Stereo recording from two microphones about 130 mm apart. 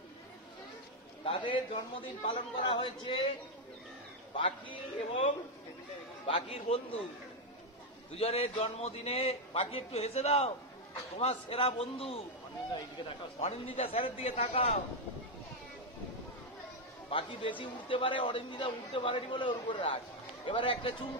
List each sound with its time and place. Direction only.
1.2 s a man's voice: 45° left (ahead or behind)
4.4 s a man's voice: 40° left (ahead or behind)
8.2 s a man's voice: 45° left (ahead or behind)
13.4 s a man's voice: 50° left (ahead or behind)
17.1 s a man's voice: 45° left (ahead or behind)